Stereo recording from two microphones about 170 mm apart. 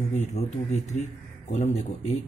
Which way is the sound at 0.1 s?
45° left (ahead or behind).